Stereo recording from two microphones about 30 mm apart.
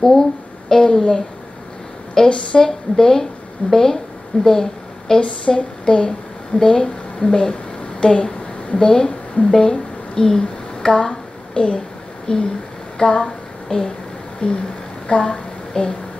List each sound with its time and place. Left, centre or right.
0.0 s speech: centre
2.2 s a woman's voice: left
5.2 s a woman's voice: left
13.0 s a sound: left
14.4 s speech: left